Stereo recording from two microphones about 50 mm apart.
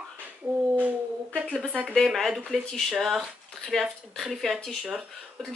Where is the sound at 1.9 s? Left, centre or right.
Centre.